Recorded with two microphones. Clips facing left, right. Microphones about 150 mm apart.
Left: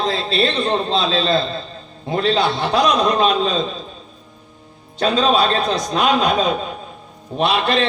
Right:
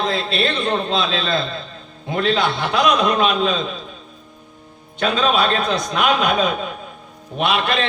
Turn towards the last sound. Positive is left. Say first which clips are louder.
# left 2 dB
turn(degrees=40)  # may be behind; listen again after turning